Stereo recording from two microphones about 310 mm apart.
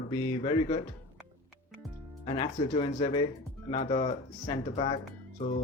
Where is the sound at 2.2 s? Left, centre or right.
Centre.